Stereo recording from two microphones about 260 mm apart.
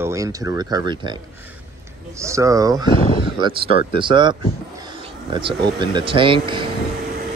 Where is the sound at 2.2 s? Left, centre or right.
Centre.